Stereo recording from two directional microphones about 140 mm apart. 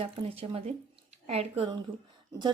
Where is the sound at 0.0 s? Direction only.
40° right (ahead or behind).